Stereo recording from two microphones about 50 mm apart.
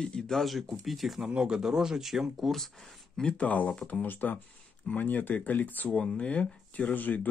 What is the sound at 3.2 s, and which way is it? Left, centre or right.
Speech, left.